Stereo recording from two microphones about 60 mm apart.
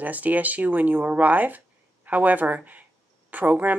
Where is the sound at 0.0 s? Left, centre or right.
Right.